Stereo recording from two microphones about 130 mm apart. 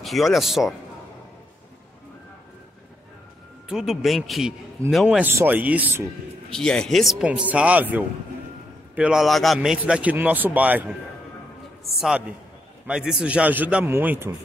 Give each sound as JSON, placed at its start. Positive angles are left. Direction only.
{"t": 0.0, "sound": "a man's voice", "side_deg": 0}
{"t": 3.6, "sound": "a man's voice", "side_deg": -5}
{"t": 5.0, "sound": "a man's voice", "side_deg": -15}
{"t": 6.5, "sound": "a man's voice", "side_deg": 5}